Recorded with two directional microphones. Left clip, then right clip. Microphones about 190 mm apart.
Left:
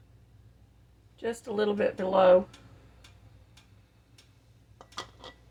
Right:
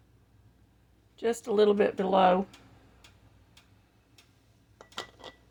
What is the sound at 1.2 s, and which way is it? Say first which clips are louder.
Speech: right 5 dB; 55° right (ahead or behind).